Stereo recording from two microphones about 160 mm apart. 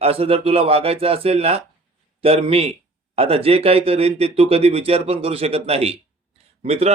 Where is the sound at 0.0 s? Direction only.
40° right (ahead or behind).